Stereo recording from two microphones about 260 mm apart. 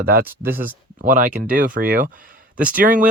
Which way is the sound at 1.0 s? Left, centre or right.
Right.